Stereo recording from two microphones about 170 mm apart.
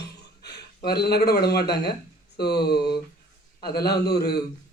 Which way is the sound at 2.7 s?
25° left (ahead or behind).